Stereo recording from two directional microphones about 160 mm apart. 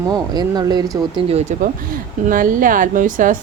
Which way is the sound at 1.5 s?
50° right (ahead or behind).